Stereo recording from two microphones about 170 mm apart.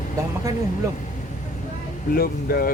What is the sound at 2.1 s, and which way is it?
Speech, 60° left (ahead or behind).